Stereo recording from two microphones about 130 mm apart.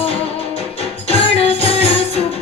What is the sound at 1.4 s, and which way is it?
Music, 50° left (ahead or behind).